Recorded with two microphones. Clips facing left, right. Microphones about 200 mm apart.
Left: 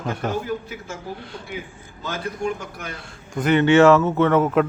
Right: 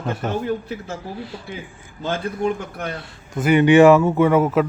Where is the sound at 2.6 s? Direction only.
60° right (ahead or behind).